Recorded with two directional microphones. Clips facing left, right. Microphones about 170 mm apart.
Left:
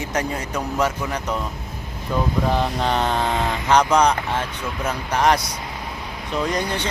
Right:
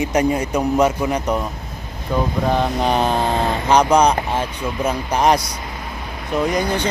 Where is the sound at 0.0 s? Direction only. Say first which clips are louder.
Right 7 dB; 20° right (ahead or behind).